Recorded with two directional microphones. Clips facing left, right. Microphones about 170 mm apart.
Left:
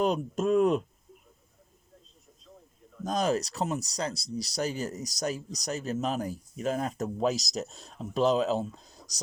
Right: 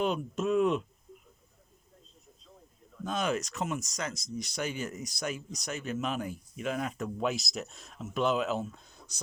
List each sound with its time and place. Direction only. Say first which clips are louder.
0.0 s speech: left 3 dB; 40° left (ahead or behind)
3.0 s speech: left 4 dB; 40° left (ahead or behind)